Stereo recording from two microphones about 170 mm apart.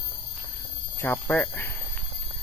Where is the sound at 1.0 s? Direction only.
10° left (ahead or behind).